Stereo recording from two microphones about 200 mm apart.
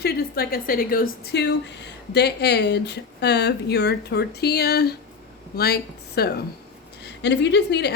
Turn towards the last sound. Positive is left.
turn(degrees=55)  # may be behind; listen again after turning